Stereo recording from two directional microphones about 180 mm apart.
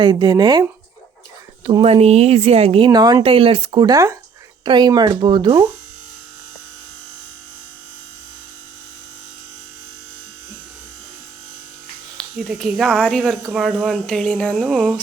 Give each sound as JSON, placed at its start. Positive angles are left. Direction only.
{"t": 0.0, "sound": "speech", "side_deg": -25}
{"t": 12.1, "sound": "speech", "side_deg": 0}